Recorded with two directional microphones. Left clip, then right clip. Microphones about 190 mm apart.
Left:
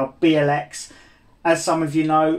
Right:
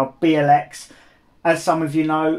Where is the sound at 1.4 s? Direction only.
40° right (ahead or behind).